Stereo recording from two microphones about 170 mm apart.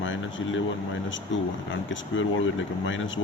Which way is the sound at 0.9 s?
90° left.